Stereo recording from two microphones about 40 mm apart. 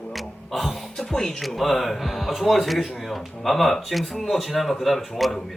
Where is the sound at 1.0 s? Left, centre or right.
Centre.